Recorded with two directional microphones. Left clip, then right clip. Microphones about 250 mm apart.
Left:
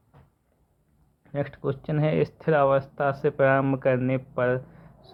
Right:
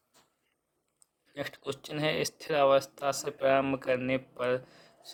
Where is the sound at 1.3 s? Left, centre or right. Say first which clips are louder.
Left 8 dB; right.